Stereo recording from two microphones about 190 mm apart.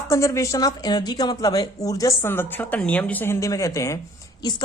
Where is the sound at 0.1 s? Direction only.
15° left (ahead or behind).